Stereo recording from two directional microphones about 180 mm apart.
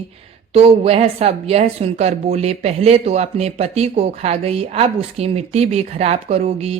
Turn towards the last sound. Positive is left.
turn(degrees=-35)  # may be behind; listen again after turning